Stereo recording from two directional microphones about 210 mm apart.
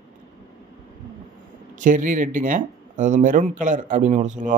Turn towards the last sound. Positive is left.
turn(degrees=-35)  # may be behind; listen again after turning